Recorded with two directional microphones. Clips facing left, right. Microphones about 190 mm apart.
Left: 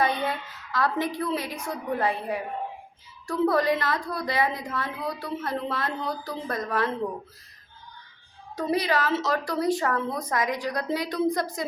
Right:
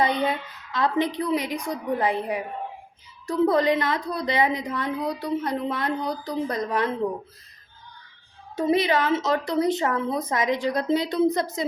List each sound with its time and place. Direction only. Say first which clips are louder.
0.0 s a woman's voice: right 3 dB; 20° right (ahead or behind)
8.5 s a woman's voice: right 4 dB; 20° right (ahead or behind)